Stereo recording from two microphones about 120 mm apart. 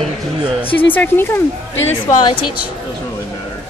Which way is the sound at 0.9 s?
15° left (ahead or behind).